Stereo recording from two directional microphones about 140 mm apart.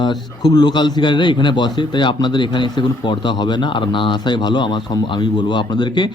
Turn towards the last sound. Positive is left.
turn(degrees=35)  # may be behind; listen again after turning